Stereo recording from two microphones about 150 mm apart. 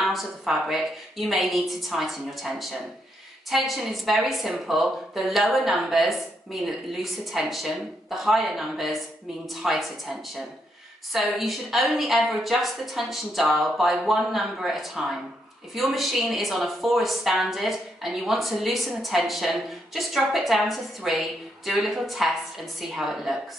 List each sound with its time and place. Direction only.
0.0 s a woman's voice: centre (ahead or behind)
11.1 s a woman's voice: centre (ahead or behind)